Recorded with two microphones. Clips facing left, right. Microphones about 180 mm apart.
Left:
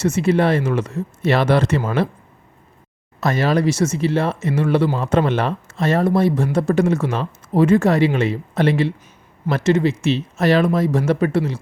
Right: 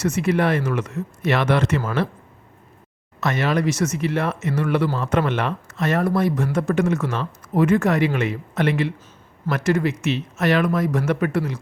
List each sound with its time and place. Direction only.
0.0 s speech: 30° left (ahead or behind)
3.2 s speech: 35° left (ahead or behind)